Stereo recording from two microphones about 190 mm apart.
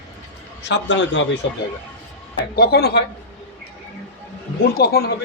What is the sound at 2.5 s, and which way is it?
Speech, 55° left (ahead or behind).